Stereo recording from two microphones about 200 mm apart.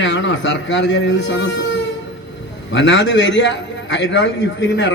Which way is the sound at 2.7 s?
65° left (ahead or behind).